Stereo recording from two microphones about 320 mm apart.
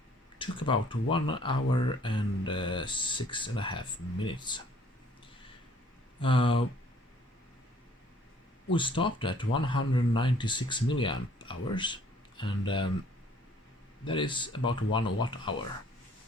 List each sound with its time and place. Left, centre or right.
0.3 s a sound: centre
1.1 s speech: centre
6.1 s speech: centre
8.7 s speech: centre
14.0 s speech: centre